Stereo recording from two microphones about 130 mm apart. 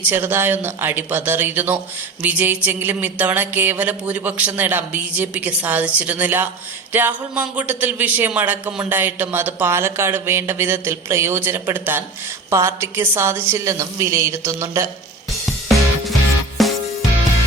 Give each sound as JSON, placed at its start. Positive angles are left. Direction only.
{"t": 0.0, "sound": "a man's voice", "side_deg": -15}
{"t": 15.4, "sound": "music", "side_deg": 0}